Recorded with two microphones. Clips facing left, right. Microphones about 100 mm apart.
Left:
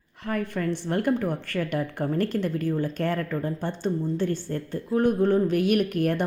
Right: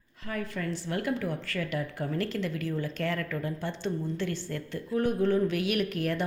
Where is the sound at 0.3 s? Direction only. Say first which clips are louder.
Left 6 dB; 55° left (ahead or behind).